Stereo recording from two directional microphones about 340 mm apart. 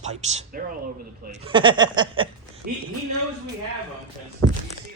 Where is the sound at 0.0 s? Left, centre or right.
Centre.